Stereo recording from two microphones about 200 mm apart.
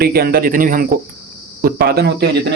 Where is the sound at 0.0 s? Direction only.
50° right (ahead or behind).